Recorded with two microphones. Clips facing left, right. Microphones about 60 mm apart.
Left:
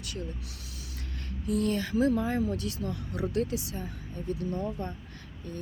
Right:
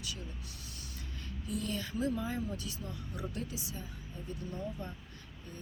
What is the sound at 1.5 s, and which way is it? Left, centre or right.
Speech, left.